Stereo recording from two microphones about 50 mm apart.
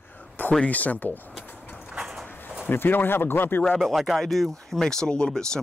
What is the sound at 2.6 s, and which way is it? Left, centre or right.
Speech, left.